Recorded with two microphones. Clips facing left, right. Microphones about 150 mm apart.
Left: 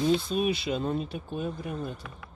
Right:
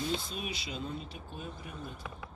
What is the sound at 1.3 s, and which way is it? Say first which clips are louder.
Speech: left 11 dB; 75° left (ahead or behind).